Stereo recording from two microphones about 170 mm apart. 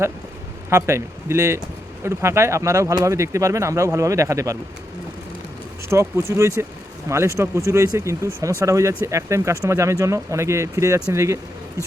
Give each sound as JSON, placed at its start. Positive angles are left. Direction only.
{"t": 0.7, "sound": "speech", "side_deg": -15}
{"t": 5.9, "sound": "speech", "side_deg": -15}